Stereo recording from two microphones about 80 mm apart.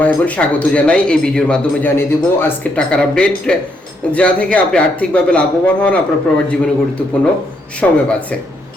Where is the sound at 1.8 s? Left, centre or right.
Left.